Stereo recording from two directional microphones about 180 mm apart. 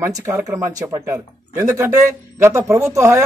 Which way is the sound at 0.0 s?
15° right (ahead or behind).